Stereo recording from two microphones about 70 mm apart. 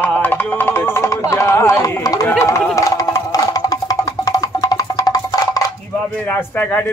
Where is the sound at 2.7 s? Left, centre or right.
Left.